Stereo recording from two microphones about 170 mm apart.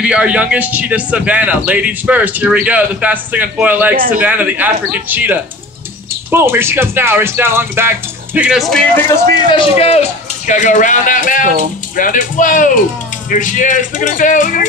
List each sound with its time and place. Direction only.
0.0 s a man's voice: 5° right (ahead or behind)
8.4 s speech: 5° right (ahead or behind)
9.3 s a man's voice: 30° left (ahead or behind); by 14.7 s 50° left (ahead or behind)